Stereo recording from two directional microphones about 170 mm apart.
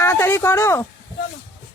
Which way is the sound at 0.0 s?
15° left (ahead or behind).